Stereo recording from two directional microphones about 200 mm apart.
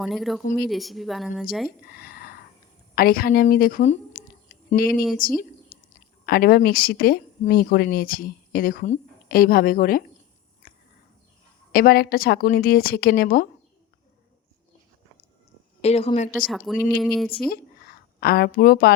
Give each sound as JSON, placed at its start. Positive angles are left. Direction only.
{"t": 0.0, "sound": "speech", "side_deg": 0}
{"t": 0.4, "sound": "speech", "side_deg": 50}
{"t": 0.7, "sound": "speech", "side_deg": 0}
{"t": 1.9, "sound": "a sound", "side_deg": 50}
{"t": 2.9, "sound": "speech", "side_deg": 45}
{"t": 5.7, "sound": "a sound", "side_deg": 45}
{"t": 6.2, "sound": "speech", "side_deg": 50}
{"t": 11.7, "sound": "speech", "side_deg": 50}
{"t": 15.8, "sound": "a woman's voice", "side_deg": 30}
{"t": 16.5, "sound": "speech", "side_deg": 0}
{"t": 18.2, "sound": "speech", "side_deg": 50}